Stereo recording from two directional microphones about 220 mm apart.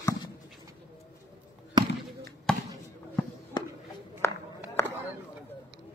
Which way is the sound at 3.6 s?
20° left (ahead or behind).